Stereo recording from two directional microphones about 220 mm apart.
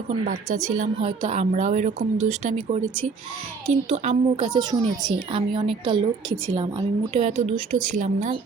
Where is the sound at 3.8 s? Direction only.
30° right (ahead or behind).